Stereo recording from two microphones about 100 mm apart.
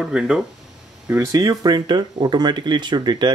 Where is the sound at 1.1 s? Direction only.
40° right (ahead or behind).